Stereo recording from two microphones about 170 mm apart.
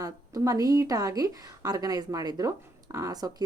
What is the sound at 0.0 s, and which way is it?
A woman's voice, 20° right (ahead or behind).